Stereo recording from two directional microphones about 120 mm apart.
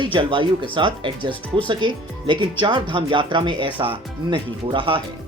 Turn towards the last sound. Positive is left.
turn(degrees=-45)  # may be behind; listen again after turning